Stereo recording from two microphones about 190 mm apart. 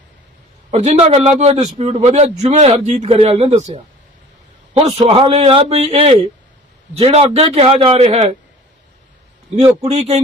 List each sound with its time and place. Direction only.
0.7 s a man's voice: 35° right (ahead or behind)
4.9 s a man's voice: 30° right (ahead or behind)
9.6 s a man's voice: 35° right (ahead or behind)